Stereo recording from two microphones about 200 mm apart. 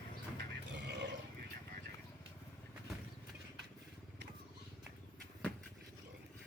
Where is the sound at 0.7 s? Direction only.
60° right (ahead or behind).